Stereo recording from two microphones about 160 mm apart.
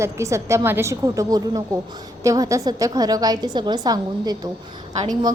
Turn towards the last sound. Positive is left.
turn(degrees=-25)  # may be behind; listen again after turning